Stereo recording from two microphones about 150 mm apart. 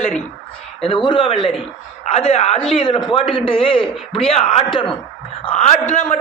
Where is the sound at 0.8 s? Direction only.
35° left (ahead or behind).